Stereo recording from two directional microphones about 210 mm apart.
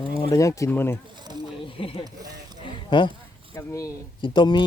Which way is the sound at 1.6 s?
25° left (ahead or behind).